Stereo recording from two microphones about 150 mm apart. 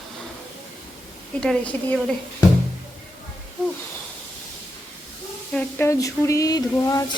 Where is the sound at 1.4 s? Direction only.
5° left (ahead or behind).